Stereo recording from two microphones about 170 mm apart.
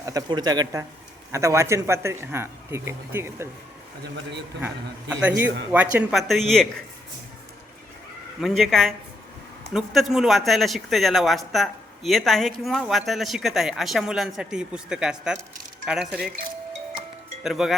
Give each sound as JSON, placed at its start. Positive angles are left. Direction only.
{"t": 0.0, "sound": "a man's voice", "side_deg": -20}
{"t": 4.6, "sound": "a man's voice", "side_deg": -10}
{"t": 8.4, "sound": "speech", "side_deg": 0}
{"t": 17.4, "sound": "speech", "side_deg": 0}